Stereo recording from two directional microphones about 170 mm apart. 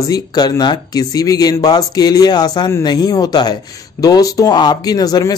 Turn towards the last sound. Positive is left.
turn(degrees=20)  # may be behind; listen again after turning